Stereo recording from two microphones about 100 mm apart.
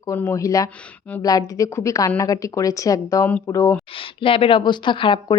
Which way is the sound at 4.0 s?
65° left (ahead or behind).